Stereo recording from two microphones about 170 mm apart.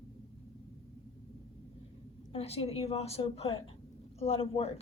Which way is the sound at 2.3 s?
35° left (ahead or behind).